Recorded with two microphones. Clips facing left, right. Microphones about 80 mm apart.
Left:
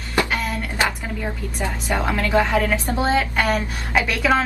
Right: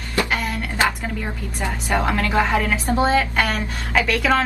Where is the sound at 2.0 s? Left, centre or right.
Centre.